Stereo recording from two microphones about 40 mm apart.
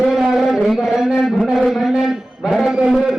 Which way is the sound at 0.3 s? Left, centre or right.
Centre.